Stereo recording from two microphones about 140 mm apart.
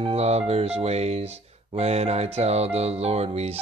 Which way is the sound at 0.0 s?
50° right (ahead or behind).